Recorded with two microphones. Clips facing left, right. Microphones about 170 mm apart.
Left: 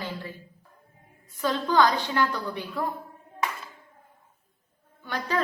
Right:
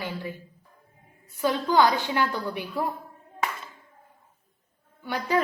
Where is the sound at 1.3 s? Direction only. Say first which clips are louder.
Right 1 dB; 15° right (ahead or behind).